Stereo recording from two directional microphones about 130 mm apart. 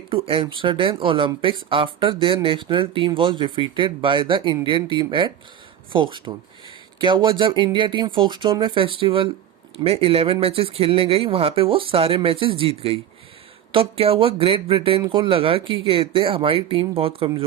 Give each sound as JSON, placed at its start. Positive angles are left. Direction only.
{"t": 0.1, "sound": "speech", "side_deg": -45}